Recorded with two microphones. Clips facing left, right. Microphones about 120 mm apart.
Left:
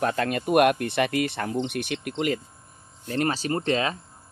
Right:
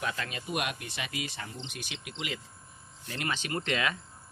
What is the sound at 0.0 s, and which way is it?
Speech, 50° left (ahead or behind).